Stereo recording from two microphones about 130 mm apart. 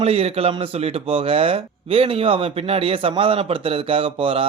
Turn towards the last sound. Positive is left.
turn(degrees=-45)  # may be behind; listen again after turning